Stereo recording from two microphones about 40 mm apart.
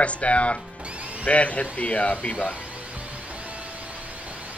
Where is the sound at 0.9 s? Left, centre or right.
Right.